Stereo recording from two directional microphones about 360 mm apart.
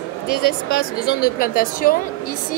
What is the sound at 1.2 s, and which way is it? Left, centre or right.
Speech, left.